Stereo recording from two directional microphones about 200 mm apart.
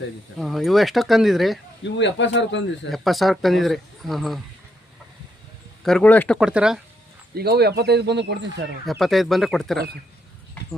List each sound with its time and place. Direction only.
0.3 s speech: centre (ahead or behind)
2.0 s speech: 65° left (ahead or behind)
2.9 s speech: centre (ahead or behind)
5.8 s speech: 5° left (ahead or behind)
7.3 s speech: 55° right (ahead or behind)
8.9 s speech: centre (ahead or behind)